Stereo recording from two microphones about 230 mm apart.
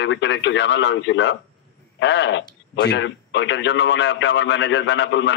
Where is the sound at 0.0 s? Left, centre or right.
Left.